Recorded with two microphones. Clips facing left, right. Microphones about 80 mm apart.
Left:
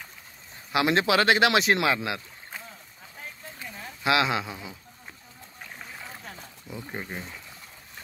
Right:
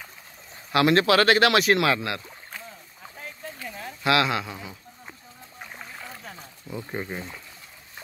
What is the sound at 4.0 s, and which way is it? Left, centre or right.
Speech, centre.